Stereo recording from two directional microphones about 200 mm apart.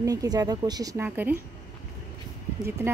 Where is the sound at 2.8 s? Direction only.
10° right (ahead or behind).